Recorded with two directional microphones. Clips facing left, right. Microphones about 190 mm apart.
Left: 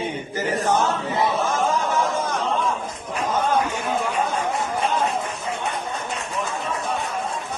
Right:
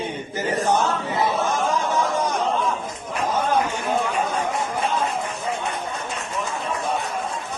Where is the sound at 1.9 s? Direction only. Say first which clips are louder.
Right 1 dB; 15° right (ahead or behind).